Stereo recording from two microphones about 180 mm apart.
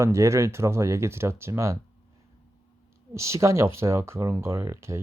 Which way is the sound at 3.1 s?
15° right (ahead or behind).